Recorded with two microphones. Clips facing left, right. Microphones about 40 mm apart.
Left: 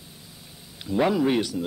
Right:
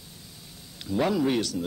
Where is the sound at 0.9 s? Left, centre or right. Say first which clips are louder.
Left 3 dB; centre.